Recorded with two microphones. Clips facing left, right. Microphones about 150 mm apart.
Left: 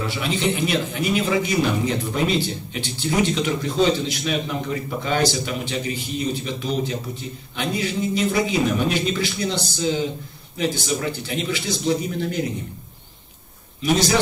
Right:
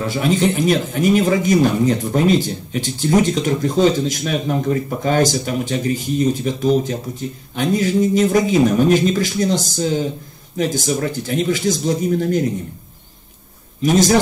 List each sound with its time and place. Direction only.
0.0 s speech: 45° right (ahead or behind)
13.8 s speech: 45° right (ahead or behind)